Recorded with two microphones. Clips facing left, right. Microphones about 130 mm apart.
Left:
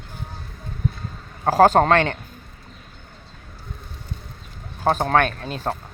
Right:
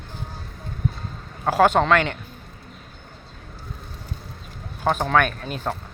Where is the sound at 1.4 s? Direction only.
40° left (ahead or behind).